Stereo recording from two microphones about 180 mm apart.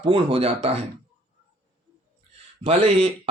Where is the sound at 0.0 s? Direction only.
30° right (ahead or behind).